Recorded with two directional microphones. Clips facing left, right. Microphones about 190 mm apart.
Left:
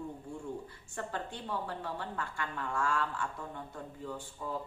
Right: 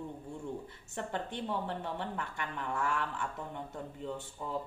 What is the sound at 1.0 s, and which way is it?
A woman's voice, 20° right (ahead or behind).